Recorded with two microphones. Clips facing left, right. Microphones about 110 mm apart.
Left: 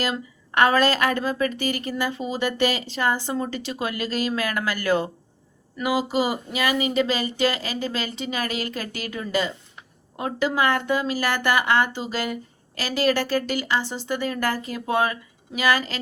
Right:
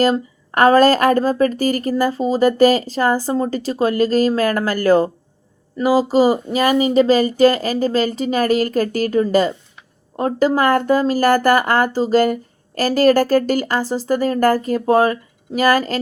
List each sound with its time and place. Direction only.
0.0 s speech: 40° right (ahead or behind)